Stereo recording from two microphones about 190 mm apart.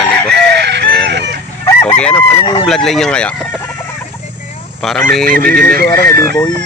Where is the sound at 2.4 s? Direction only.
25° left (ahead or behind).